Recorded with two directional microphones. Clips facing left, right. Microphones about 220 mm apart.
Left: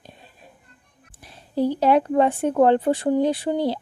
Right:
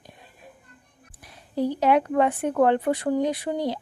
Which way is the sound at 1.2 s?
30° left (ahead or behind).